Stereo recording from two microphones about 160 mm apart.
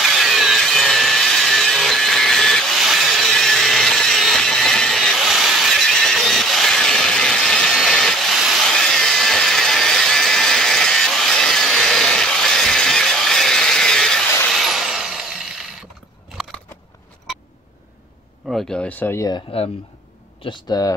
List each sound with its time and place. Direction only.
0.0 s a sound: centre (ahead or behind)
18.5 s speech: centre (ahead or behind); by 19.4 s 20° left (ahead or behind)
20.4 s speech: 30° left (ahead or behind)